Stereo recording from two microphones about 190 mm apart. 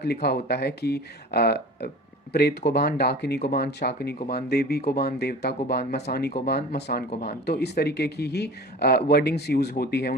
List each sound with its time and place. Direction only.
0.0 s speech: 60° left (ahead or behind)
7.1 s speech: 35° left (ahead or behind)
7.4 s speech: 60° left (ahead or behind)